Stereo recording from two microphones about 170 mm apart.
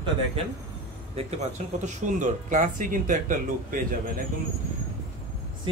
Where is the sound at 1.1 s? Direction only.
40° right (ahead or behind).